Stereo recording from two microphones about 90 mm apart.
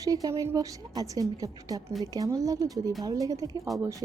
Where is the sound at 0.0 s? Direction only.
40° right (ahead or behind).